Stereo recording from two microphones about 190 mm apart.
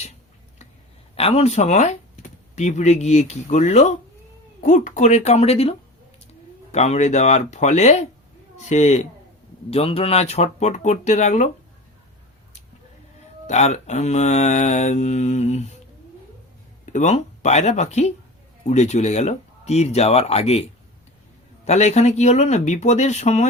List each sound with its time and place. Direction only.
1.1 s speech: 30° left (ahead or behind)
13.5 s speech: 35° left (ahead or behind)
16.8 s speech: 40° left (ahead or behind)